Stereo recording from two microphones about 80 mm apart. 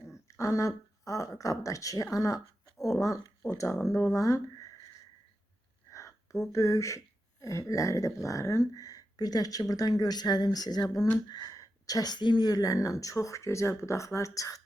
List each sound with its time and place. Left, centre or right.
0.3 s speech: left
5.9 s a sound: left
6.5 s speech: left